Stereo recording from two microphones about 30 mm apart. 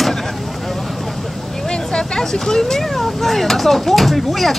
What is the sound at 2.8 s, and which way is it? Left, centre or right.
Speech, centre.